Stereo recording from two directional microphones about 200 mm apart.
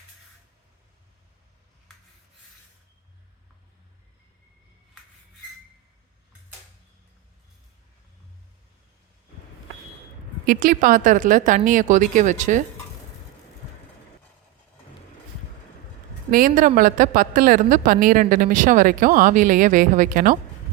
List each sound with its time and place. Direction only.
10.4 s speech: 45° right (ahead or behind)
16.3 s a woman's voice: 45° right (ahead or behind)